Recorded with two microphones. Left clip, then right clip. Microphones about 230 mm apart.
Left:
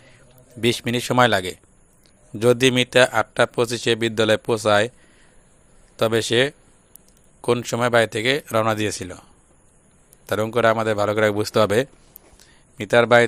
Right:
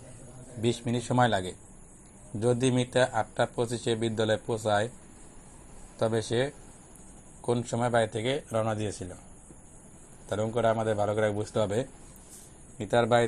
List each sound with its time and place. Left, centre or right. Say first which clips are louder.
0.6 s a man's voice: left 9 dB; left
6.0 s a man's voice: left 9 dB; left
10.2 s a man's voice: left 8 dB; left